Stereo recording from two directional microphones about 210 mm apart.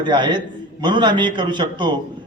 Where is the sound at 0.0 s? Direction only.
20° right (ahead or behind).